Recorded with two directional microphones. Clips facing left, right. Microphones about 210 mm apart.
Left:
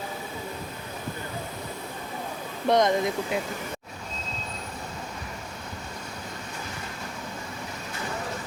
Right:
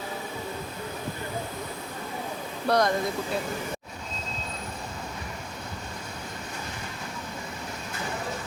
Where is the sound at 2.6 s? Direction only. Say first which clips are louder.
Left 2 dB; 20° left (ahead or behind).